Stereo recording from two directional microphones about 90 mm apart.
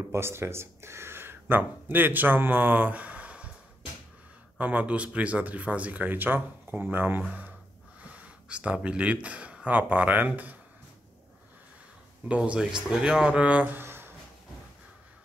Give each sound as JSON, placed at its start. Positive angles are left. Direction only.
{"t": 0.1, "sound": "speech", "side_deg": -30}
{"t": 4.6, "sound": "speech", "side_deg": -15}
{"t": 12.3, "sound": "speech", "side_deg": -10}